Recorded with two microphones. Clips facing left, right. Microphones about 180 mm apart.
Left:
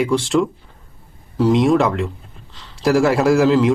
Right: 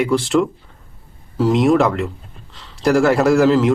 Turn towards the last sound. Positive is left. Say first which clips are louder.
# right 1 dB
turn(degrees=0)  # may be behind; listen again after turning